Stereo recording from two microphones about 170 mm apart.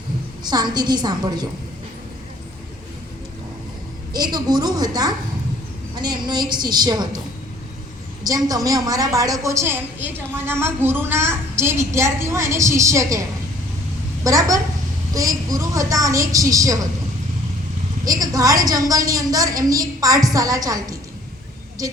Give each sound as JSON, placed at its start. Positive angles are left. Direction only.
{"t": 0.4, "sound": "a woman's voice", "side_deg": -25}
{"t": 4.1, "sound": "a woman's voice", "side_deg": -25}
{"t": 8.4, "sound": "a woman's voice", "side_deg": -20}
{"t": 14.3, "sound": "a woman's voice", "side_deg": -20}
{"t": 18.2, "sound": "a woman's voice", "side_deg": -20}